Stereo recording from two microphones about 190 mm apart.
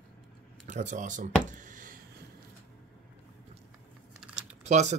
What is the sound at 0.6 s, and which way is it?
Speech, 40° right (ahead or behind).